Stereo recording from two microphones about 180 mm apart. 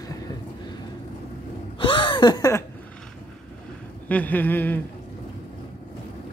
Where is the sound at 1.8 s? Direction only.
25° left (ahead or behind).